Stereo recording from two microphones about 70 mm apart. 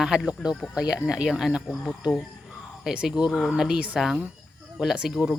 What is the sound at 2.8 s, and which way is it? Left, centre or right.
Speech, centre.